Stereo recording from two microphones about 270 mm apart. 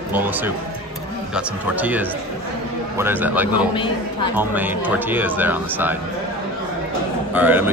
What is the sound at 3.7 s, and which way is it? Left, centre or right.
Speech, centre.